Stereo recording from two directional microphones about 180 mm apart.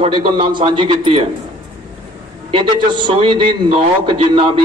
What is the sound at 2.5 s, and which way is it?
A man's voice, 25° right (ahead or behind).